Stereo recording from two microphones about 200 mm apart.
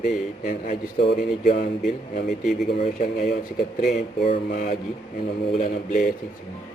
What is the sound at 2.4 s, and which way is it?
Speech, centre (ahead or behind).